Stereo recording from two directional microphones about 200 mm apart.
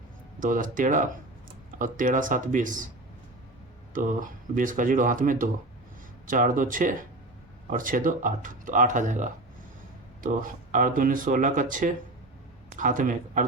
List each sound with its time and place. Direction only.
0.3 s speech: 40° right (ahead or behind)
3.9 s speech: 40° right (ahead or behind)